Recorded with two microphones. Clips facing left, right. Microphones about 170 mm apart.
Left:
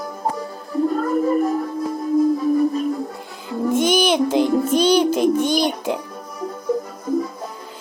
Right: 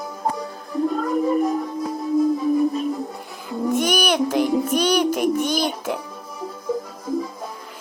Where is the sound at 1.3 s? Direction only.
Centre (ahead or behind).